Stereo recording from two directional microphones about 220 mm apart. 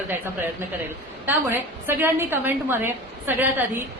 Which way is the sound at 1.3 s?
10° right (ahead or behind).